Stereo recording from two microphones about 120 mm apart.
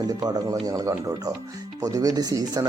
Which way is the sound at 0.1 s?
30° right (ahead or behind).